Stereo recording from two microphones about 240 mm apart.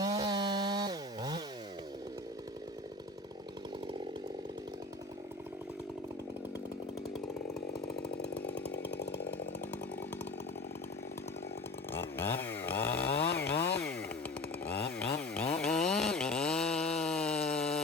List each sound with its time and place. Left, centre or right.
0.0 s chainsaw: centre
8.5 s chainsaw: left
11.9 s chainsaw: centre